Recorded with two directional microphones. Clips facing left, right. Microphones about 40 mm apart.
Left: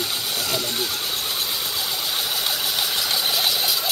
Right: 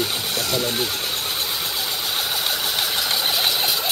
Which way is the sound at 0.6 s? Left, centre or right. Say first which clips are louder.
Right 2 dB; centre.